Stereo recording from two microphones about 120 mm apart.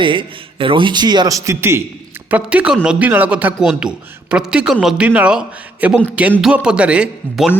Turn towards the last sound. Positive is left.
turn(degrees=-5)  # may be behind; listen again after turning